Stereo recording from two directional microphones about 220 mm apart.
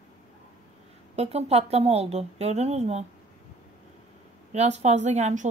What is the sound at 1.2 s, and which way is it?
A woman's voice, 30° right (ahead or behind).